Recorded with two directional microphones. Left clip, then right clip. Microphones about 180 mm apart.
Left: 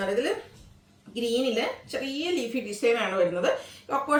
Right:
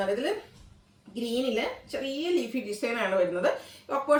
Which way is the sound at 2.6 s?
10° left (ahead or behind).